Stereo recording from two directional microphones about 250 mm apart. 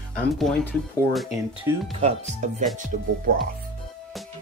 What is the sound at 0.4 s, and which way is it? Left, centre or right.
Speech, centre.